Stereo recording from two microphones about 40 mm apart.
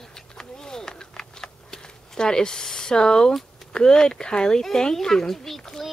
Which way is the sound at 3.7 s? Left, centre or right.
Centre.